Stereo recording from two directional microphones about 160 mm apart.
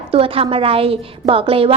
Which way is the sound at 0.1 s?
35° right (ahead or behind).